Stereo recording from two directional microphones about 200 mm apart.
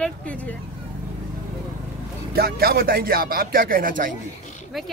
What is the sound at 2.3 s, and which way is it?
Speech, 50° right (ahead or behind).